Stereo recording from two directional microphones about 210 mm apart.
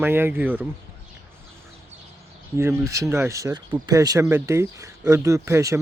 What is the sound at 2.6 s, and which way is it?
Speech, 15° right (ahead or behind).